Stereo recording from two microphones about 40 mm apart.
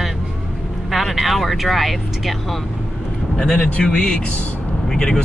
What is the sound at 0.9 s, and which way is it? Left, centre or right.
Speech, centre.